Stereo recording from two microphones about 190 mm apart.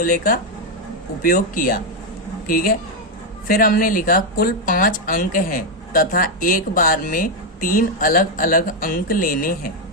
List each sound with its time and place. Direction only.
0.0 s speech: 45° left (ahead or behind)